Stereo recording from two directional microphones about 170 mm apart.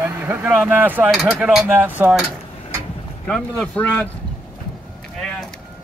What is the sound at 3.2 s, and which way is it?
Speech, 5° left (ahead or behind).